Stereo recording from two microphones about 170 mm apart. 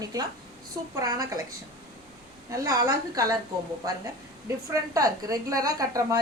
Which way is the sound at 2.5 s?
20° right (ahead or behind).